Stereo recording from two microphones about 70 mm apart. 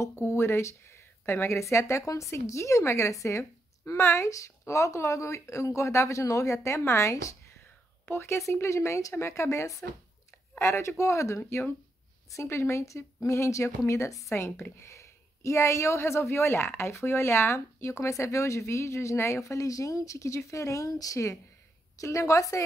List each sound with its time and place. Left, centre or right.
0.0 s speech: left
8.0 s speech: left